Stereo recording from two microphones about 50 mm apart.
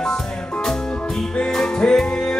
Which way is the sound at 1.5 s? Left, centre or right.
Centre.